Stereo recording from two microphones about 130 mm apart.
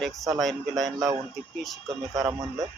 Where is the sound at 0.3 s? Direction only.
Centre (ahead or behind).